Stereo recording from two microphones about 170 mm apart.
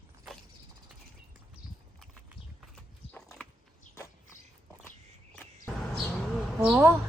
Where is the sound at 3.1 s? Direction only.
5° left (ahead or behind).